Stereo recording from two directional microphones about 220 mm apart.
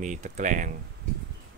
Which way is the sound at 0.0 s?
35° right (ahead or behind).